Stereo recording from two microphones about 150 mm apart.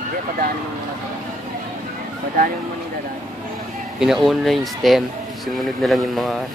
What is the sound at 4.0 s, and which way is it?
Speech, centre (ahead or behind).